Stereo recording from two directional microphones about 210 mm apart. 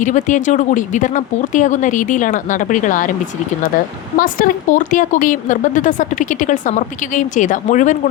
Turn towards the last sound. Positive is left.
turn(degrees=35)  # may be behind; listen again after turning